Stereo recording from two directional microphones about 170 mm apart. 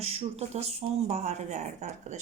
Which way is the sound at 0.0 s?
35° right (ahead or behind).